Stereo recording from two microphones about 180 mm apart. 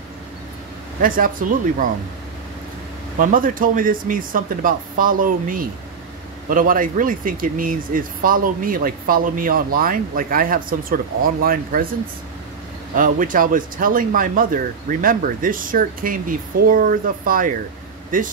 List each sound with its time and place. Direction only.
1.0 s speech: 50° right (ahead or behind)
3.2 s speech: 50° right (ahead or behind)
12.9 s speech: 50° right (ahead or behind)